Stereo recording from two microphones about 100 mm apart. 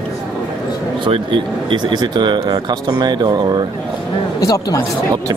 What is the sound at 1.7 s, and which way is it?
Speech, 45° right (ahead or behind).